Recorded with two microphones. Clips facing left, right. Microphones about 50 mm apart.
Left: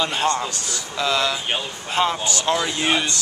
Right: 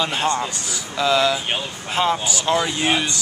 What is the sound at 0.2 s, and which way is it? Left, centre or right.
Speech, centre.